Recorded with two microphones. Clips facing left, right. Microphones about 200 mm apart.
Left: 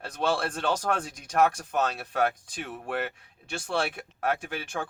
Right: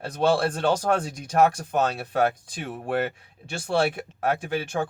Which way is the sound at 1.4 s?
30° right (ahead or behind).